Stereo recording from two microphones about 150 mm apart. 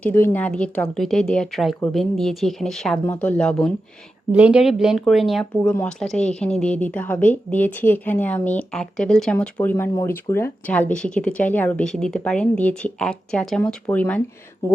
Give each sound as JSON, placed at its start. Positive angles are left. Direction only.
{"t": 0.0, "sound": "speech", "side_deg": 15}
{"t": 4.3, "sound": "speech", "side_deg": -10}